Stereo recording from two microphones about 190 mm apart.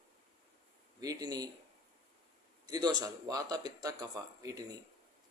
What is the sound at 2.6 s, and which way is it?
A man's voice, 20° right (ahead or behind).